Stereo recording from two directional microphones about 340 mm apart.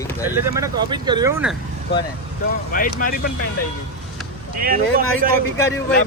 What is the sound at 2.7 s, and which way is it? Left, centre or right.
Speech, left.